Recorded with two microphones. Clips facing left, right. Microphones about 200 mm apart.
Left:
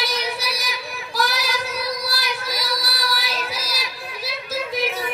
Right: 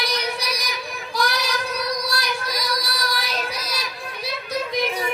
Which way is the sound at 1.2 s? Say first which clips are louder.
Even; centre (ahead or behind).